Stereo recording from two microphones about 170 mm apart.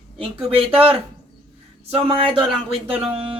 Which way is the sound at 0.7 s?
10° right (ahead or behind).